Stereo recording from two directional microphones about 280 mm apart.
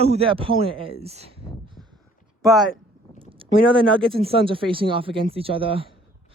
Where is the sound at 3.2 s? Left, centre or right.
Centre.